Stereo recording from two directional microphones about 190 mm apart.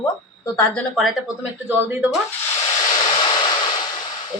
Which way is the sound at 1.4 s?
10° right (ahead or behind).